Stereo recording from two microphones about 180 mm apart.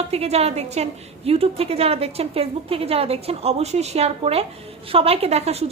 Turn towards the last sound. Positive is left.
turn(degrees=-35)  # may be behind; listen again after turning